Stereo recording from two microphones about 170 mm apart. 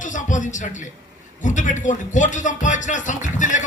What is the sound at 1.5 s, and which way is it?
A man's voice, 45° left (ahead or behind).